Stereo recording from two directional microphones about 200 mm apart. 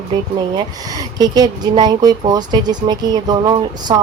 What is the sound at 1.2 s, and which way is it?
Speech, 20° right (ahead or behind).